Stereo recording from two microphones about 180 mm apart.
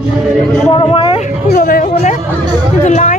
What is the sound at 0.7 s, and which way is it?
Speech, 30° left (ahead or behind).